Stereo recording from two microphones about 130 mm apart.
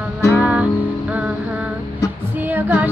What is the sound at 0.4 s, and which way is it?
Music, 10° right (ahead or behind).